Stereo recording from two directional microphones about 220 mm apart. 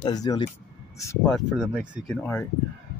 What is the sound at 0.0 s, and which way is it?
Speech, 15° left (ahead or behind).